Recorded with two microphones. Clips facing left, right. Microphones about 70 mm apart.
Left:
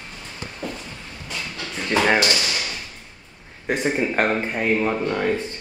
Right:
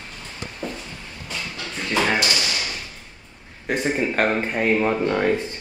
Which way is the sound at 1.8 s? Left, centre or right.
Centre.